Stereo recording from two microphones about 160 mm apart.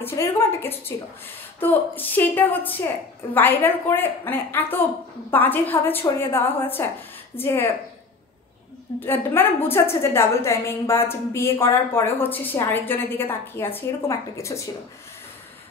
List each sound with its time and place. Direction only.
0.0 s a woman's voice: 15° left (ahead or behind)
9.0 s a woman's voice: 15° left (ahead or behind)